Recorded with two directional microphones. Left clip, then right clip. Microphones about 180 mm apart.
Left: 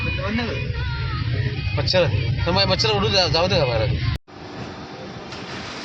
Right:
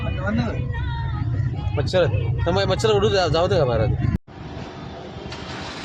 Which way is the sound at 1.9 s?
60° right (ahead or behind).